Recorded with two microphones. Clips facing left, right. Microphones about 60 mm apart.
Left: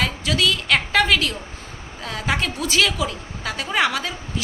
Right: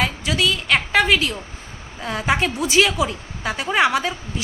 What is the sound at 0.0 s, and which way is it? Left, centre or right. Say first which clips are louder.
A woman's voice: right 1 dB; centre.